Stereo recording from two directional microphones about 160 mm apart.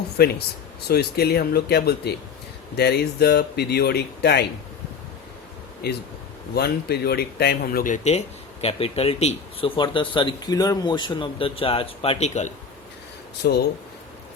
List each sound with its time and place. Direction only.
0.2 s speech: 75° left (ahead or behind)
6.5 s speech: 90° left; by 12.5 s 45° left (ahead or behind)
13.4 s speech: 90° left